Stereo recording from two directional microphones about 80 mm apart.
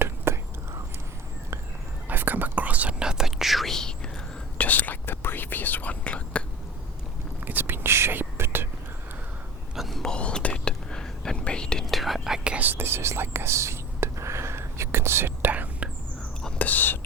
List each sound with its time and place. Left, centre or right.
0.3 s whispering: right
2.0 s whispering: right; by 4.1 s centre
4.5 s whispering: centre
7.4 s whispering: right
9.7 s whispering: centre
12.5 s whispering: right
16.6 s whispering: left